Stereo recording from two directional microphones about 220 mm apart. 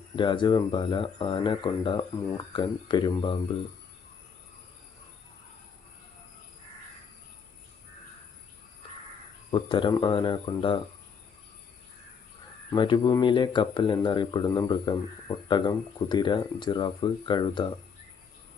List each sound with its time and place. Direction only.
0.2 s speech: 20° left (ahead or behind)
9.5 s speech: 20° left (ahead or behind)
12.7 s speech: 20° left (ahead or behind)